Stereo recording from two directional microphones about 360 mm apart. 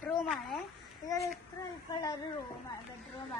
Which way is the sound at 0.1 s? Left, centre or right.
Centre.